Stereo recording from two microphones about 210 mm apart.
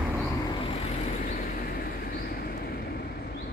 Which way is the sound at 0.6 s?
25° left (ahead or behind).